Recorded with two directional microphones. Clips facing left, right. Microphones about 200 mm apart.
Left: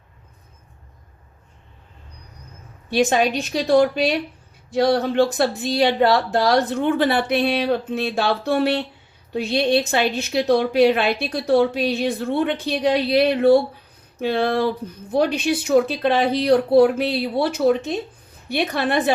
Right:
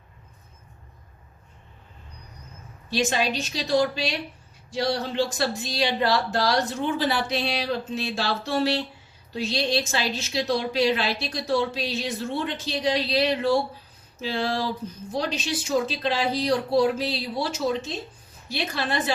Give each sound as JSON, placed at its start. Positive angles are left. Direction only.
{"t": 2.9, "sound": "a woman's voice", "side_deg": 55}